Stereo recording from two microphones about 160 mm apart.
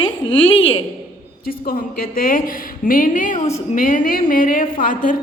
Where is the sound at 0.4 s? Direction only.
35° left (ahead or behind).